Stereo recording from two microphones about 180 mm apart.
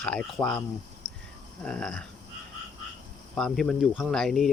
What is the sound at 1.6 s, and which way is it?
Speech, 5° left (ahead or behind).